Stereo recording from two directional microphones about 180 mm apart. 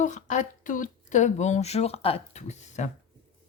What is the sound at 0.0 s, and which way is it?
A woman's voice, 40° left (ahead or behind).